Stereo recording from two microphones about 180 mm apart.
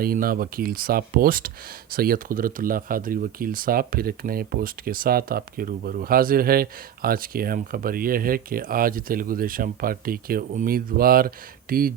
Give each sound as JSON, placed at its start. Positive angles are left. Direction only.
{"t": 0.0, "sound": "speech", "side_deg": -55}